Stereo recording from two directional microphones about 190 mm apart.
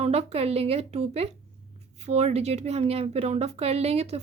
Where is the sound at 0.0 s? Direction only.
35° right (ahead or behind).